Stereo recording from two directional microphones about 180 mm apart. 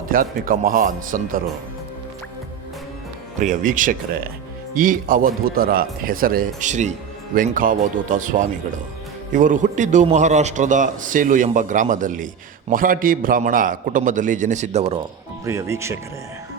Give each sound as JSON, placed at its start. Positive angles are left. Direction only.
{"t": 0.1, "sound": "a man's voice", "side_deg": -55}
{"t": 3.4, "sound": "a man's voice", "side_deg": -45}
{"t": 15.4, "sound": "speech", "side_deg": -15}